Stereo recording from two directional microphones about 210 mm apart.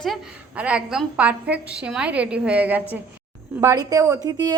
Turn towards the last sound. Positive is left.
turn(degrees=-20)  # may be behind; listen again after turning